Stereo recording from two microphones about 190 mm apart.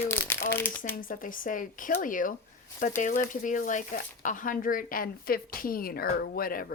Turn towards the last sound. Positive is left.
turn(degrees=50)  # may be behind; listen again after turning